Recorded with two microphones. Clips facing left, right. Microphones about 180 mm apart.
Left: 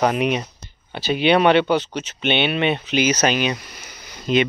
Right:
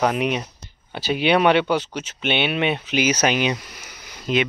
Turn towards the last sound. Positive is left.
turn(degrees=-5)  # may be behind; listen again after turning